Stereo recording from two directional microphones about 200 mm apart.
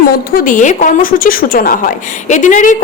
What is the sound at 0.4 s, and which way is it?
A woman's voice, 40° left (ahead or behind).